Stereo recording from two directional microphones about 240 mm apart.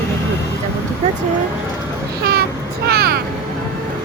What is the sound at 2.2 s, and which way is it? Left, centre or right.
Speech, right.